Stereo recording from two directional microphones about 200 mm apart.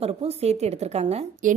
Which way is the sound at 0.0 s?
30° right (ahead or behind).